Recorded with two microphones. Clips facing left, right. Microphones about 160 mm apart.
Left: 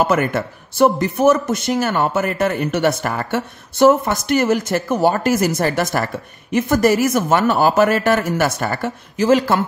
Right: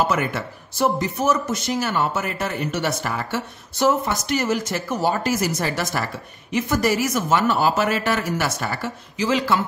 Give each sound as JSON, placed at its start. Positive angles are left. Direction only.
{"t": 0.1, "sound": "speech", "side_deg": 55}